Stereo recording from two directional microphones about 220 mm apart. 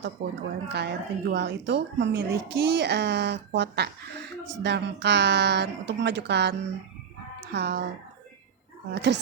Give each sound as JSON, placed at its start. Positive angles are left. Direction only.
{"t": 0.2, "sound": "a woman's voice", "side_deg": -50}
{"t": 9.0, "sound": "a woman's voice", "side_deg": -50}